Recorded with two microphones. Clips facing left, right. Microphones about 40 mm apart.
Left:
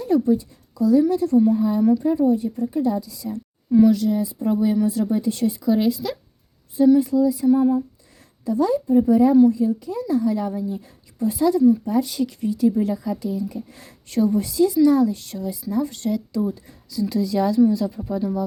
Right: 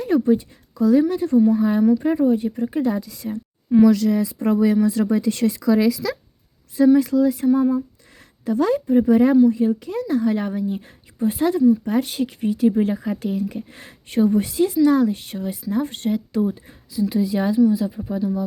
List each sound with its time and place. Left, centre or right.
0.0 s a woman's voice: right
1.5 s speech: right
2.2 s speech: right
3.3 s a sound: right
3.8 s speech: right
6.7 s speech: right; by 18.2 s centre